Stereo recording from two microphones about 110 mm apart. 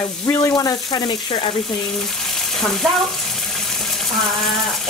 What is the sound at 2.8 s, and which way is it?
Speech, centre (ahead or behind).